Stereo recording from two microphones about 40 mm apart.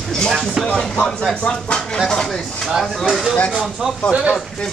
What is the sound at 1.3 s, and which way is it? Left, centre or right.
Stir, left.